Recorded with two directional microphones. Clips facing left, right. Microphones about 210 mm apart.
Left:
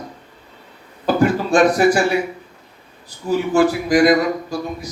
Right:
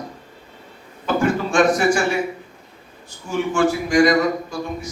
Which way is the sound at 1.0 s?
35° left (ahead or behind).